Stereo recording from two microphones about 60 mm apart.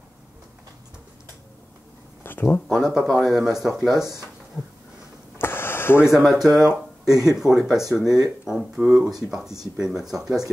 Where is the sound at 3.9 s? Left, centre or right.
Right.